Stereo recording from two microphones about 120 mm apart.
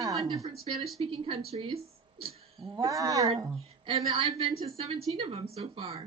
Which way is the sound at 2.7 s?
30° right (ahead or behind).